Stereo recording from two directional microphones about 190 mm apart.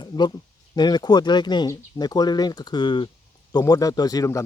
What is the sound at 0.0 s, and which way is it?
A man's voice, 25° left (ahead or behind).